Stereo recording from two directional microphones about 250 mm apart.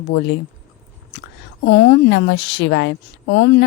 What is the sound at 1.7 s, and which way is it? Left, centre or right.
Speech, left.